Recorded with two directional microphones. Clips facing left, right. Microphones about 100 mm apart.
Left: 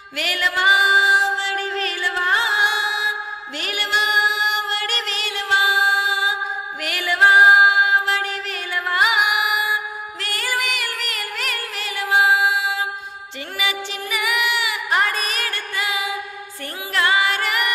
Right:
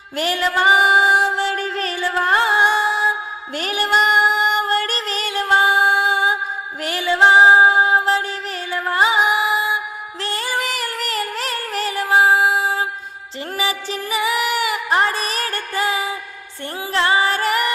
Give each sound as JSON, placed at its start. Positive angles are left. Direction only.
{"t": 0.2, "sound": "music", "side_deg": -35}
{"t": 7.0, "sound": "music", "side_deg": -25}
{"t": 10.7, "sound": "music", "side_deg": -35}